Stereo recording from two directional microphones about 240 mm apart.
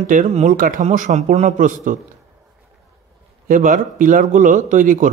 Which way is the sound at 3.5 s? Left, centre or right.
Right.